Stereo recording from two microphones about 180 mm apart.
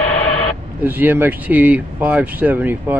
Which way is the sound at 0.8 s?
10° right (ahead or behind).